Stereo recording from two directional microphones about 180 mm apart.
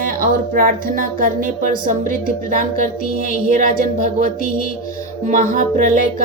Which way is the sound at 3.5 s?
50° right (ahead or behind).